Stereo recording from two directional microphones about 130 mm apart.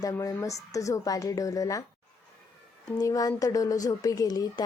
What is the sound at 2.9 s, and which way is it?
Speech, 25° left (ahead or behind).